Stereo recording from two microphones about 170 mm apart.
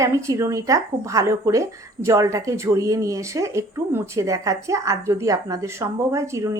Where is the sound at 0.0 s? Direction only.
20° right (ahead or behind).